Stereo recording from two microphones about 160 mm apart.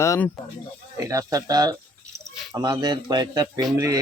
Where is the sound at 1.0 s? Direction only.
20° right (ahead or behind).